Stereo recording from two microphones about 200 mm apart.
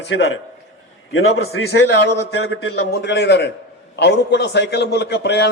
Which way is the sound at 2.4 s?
55° left (ahead or behind).